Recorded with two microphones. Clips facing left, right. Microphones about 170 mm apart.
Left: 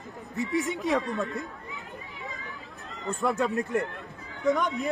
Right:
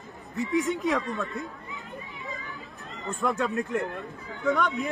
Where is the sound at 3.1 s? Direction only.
20° left (ahead or behind).